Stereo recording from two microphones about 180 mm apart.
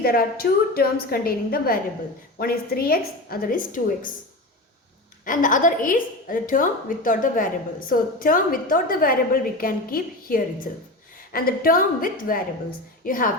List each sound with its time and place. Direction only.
0.0 s a woman's voice: 55° left (ahead or behind)
5.2 s a woman's voice: 50° left (ahead or behind)